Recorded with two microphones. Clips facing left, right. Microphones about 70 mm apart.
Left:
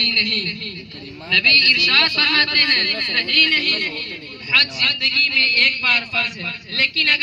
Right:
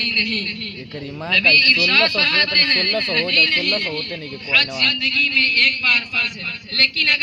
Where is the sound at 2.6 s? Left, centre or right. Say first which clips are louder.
Right 1 dB; centre.